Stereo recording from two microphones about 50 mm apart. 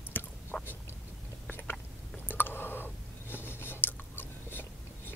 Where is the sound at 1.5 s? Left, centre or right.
Left.